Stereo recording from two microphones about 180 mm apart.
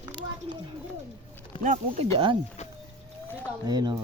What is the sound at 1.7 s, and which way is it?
Speech, 30° right (ahead or behind).